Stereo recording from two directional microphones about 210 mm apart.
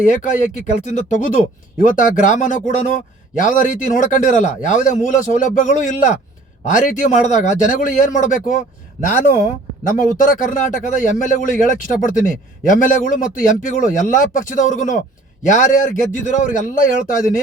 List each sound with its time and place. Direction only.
0.0 s speech: 35° left (ahead or behind)